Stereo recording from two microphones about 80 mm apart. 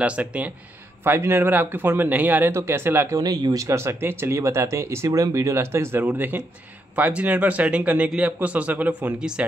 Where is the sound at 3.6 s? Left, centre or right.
Right.